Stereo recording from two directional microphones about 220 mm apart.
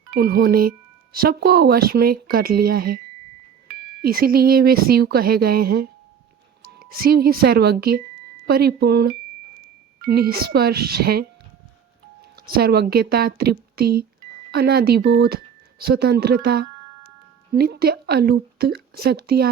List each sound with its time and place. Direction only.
0.1 s a woman's voice: 45° right (ahead or behind)
4.0 s a woman's voice: 45° right (ahead or behind)
12.5 s a woman's voice: 45° right (ahead or behind)